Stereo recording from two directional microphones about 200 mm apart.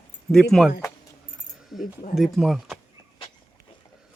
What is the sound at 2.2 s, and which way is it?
Speech, centre (ahead or behind).